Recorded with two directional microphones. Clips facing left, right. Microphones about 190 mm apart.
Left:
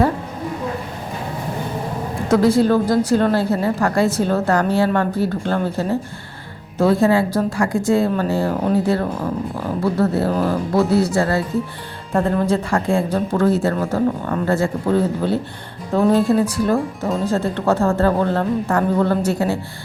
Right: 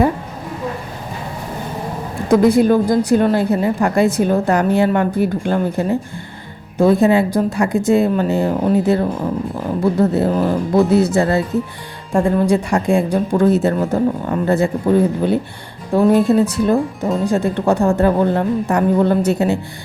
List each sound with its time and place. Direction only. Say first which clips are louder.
2.3 s a woman's voice: right 3 dB; 15° right (ahead or behind)